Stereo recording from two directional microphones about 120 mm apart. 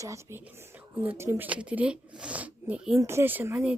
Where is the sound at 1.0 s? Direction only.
15° right (ahead or behind).